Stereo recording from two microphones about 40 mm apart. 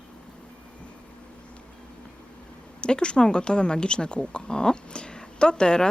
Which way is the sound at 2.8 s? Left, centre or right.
Left.